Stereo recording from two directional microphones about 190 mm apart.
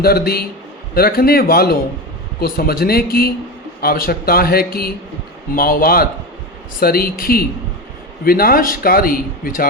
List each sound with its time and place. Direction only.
0.0 s a man's voice: 55° left (ahead or behind)